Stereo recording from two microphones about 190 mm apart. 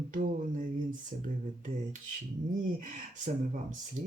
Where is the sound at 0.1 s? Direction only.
45° right (ahead or behind).